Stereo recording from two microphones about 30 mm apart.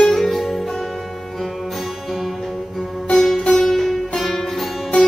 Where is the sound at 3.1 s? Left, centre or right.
Centre.